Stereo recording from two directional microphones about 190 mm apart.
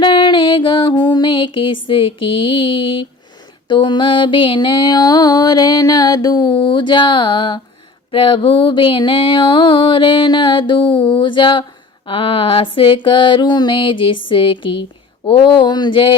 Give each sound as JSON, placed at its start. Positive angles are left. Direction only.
{"t": 0.0, "sound": "music", "side_deg": 25}